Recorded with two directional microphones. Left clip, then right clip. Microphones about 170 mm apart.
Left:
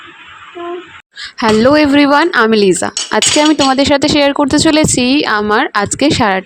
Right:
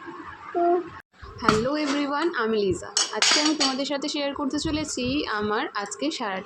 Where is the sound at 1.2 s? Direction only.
65° left (ahead or behind).